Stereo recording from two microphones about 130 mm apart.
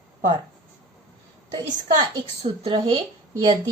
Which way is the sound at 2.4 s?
45° right (ahead or behind).